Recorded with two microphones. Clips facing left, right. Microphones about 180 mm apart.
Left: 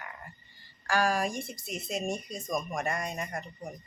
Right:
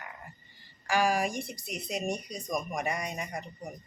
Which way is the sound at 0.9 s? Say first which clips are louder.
Right 1 dB; 15° right (ahead or behind).